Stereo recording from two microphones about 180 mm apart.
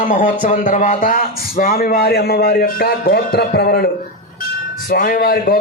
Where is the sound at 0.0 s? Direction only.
45° left (ahead or behind); by 3.8 s 60° left (ahead or behind).